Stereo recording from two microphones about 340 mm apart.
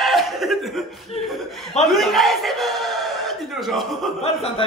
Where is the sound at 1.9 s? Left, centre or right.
Centre.